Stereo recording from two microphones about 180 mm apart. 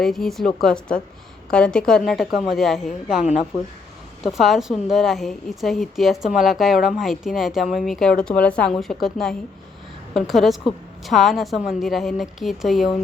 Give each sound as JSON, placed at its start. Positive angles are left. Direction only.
{"t": 0.0, "sound": "a woman's voice", "side_deg": 0}
{"t": 3.5, "sound": "speech", "side_deg": 20}
{"t": 4.2, "sound": "a woman's voice", "side_deg": 0}